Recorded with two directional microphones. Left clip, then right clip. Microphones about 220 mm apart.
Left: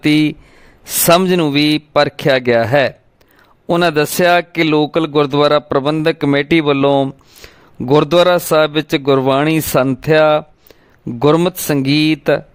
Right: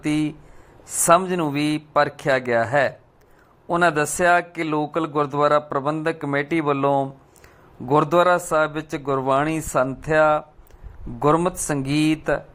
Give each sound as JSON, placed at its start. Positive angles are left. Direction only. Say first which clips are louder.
{"t": 0.0, "sound": "a man's voice", "louder": "left 10 dB", "side_deg": 55}